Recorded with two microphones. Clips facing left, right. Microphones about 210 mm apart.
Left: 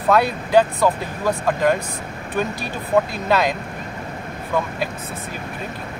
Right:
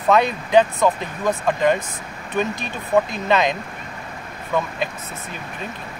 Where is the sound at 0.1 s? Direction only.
10° left (ahead or behind).